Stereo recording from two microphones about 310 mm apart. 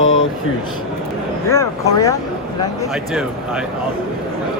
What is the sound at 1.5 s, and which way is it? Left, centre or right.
Speech, centre.